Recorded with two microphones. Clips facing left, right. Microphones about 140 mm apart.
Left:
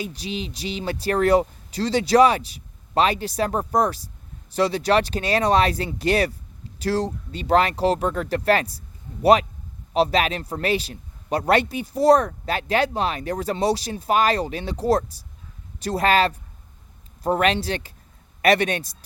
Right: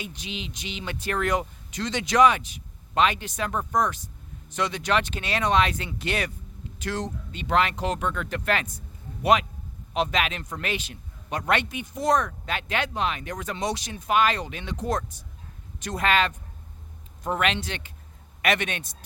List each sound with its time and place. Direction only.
0.0 s a man's voice: 35° left (ahead or behind)